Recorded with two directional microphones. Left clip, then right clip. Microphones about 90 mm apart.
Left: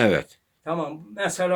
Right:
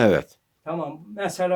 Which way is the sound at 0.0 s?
35° right (ahead or behind).